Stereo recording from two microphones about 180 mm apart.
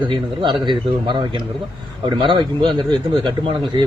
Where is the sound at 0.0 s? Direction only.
25° right (ahead or behind).